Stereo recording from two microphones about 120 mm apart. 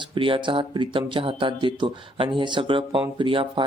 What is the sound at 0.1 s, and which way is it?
Speech, 45° right (ahead or behind).